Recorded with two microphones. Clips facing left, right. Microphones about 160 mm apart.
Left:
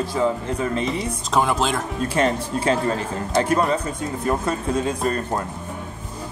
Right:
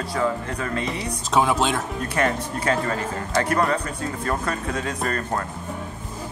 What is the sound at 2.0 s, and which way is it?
Speech, 25° left (ahead or behind).